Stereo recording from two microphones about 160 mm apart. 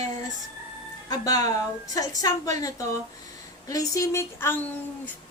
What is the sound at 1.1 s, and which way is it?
A woman's voice, 20° left (ahead or behind).